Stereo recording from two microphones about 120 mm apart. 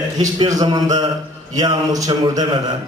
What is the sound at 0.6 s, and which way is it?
A man's voice, 35° right (ahead or behind).